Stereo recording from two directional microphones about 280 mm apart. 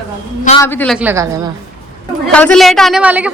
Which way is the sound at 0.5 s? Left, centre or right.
Centre.